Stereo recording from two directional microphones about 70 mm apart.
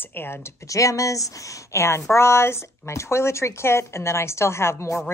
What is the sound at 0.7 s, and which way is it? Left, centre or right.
A woman's voice, left.